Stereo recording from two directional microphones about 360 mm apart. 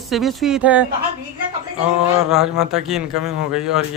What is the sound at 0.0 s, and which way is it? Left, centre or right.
Speech, centre.